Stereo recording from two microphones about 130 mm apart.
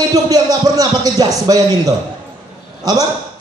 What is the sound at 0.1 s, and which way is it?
A man's voice, 30° right (ahead or behind).